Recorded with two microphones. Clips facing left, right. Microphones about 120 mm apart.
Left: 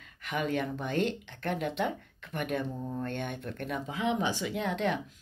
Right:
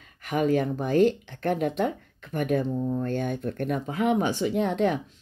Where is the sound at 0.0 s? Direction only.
40° right (ahead or behind).